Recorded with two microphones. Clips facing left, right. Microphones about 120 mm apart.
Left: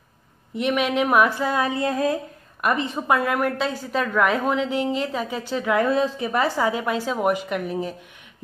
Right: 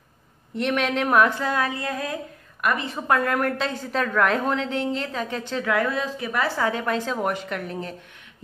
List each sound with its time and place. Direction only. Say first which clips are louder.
0.6 s speech: left 2 dB; 5° left (ahead or behind)
1.6 s a woman's voice: left 5 dB; 25° left (ahead or behind)
3.1 s speech: even; 5° left (ahead or behind)
5.7 s a woman's voice: left 4 dB; 25° left (ahead or behind)
6.6 s speech: left 1 dB; 10° left (ahead or behind)